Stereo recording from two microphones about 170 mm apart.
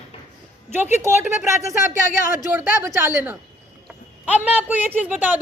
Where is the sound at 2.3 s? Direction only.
15° right (ahead or behind).